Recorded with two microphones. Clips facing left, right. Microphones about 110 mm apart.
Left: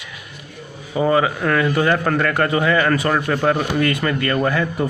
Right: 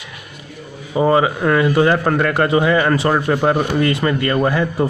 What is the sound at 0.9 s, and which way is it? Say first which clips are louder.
A man's voice: right 3 dB; 25° right (ahead or behind).